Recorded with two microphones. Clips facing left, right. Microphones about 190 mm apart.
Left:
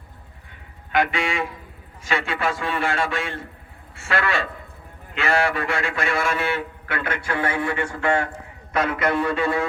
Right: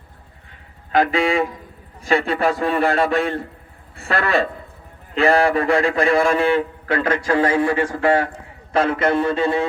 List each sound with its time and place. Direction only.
0.9 s a man's voice: 35° right (ahead or behind)